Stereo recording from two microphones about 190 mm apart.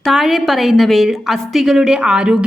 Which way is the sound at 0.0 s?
Centre (ahead or behind).